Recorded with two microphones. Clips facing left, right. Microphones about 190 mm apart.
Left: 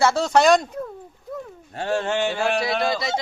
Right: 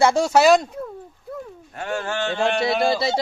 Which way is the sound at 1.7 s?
30° left (ahead or behind).